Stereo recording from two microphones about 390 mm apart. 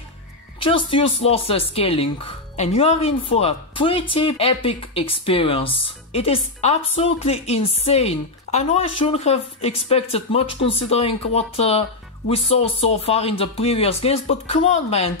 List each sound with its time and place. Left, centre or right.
0.6 s a woman's voice: centre